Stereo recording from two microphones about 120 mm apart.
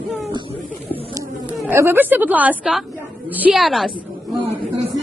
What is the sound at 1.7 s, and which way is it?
Speech, 20° right (ahead or behind).